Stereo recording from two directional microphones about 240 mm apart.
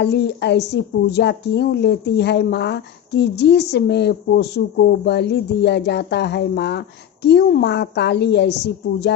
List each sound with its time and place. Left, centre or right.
0.0 s a woman's voice: left